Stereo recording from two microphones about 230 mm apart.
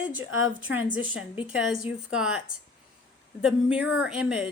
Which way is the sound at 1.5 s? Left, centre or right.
Centre.